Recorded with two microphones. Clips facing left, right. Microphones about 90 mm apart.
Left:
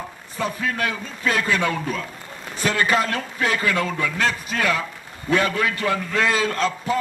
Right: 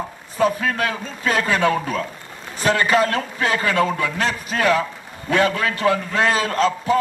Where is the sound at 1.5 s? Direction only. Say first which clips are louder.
Right 3 dB; 35° right (ahead or behind).